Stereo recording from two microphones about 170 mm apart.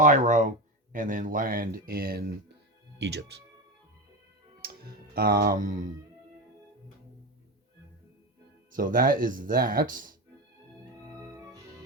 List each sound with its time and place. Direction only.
0.0 s speech: 50° right (ahead or behind)
3.0 s speech: 80° right
4.6 s speech: 65° right (ahead or behind)
8.7 s speech: 55° right (ahead or behind)